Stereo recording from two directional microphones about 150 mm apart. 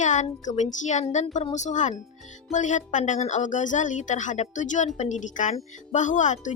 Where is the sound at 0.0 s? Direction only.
55° left (ahead or behind).